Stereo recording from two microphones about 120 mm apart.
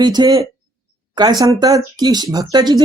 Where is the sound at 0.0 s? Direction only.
35° right (ahead or behind).